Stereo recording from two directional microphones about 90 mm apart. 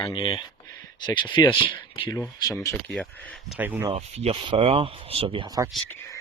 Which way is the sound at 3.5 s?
20° right (ahead or behind).